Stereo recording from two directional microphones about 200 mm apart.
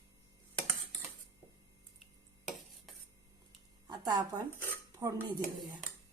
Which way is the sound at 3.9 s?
20° right (ahead or behind).